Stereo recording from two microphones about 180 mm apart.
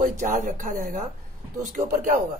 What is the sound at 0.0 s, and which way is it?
Speech, 45° right (ahead or behind).